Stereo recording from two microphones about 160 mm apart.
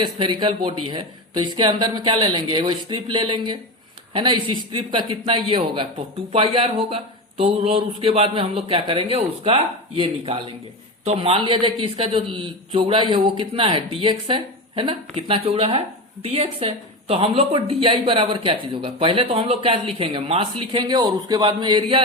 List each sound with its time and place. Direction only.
0.0 s speech: 30° right (ahead or behind)